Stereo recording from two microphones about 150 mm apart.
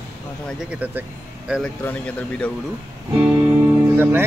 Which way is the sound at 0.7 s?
10° right (ahead or behind).